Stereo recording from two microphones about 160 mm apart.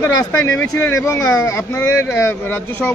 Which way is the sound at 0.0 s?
15° left (ahead or behind).